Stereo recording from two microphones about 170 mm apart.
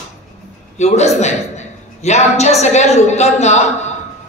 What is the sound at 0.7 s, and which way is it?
A man's voice, 40° left (ahead or behind).